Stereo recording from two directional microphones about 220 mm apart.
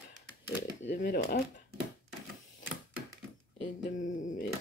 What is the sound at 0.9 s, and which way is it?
Speech, 45° left (ahead or behind).